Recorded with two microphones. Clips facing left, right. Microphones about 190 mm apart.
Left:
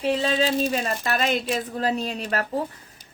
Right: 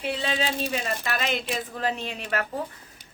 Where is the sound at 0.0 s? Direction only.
35° left (ahead or behind).